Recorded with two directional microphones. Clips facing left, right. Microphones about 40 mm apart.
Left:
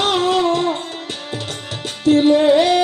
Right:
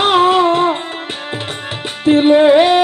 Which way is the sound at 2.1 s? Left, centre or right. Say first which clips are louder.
Right 3 dB; right.